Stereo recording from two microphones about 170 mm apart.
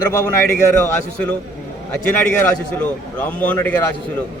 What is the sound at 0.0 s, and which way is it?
A man's voice, 20° left (ahead or behind).